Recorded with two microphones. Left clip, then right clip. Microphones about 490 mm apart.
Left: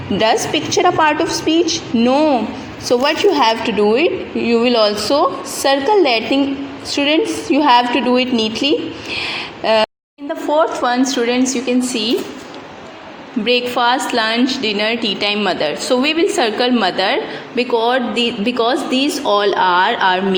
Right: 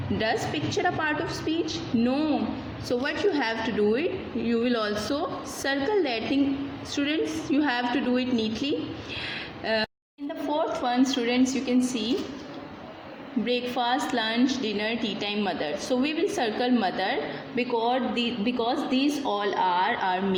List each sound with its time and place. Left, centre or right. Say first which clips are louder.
0.2 s a woman's voice: left 13 dB; right
9.1 s a sound: left 13 dB; right
10.5 s a woman's voice: left 12 dB; right
13.4 s a woman's voice: left 12 dB; right